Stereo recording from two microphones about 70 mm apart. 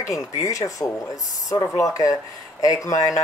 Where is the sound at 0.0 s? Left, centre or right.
Left.